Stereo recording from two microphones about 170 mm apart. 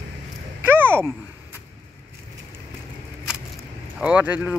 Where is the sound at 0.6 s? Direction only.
10° right (ahead or behind).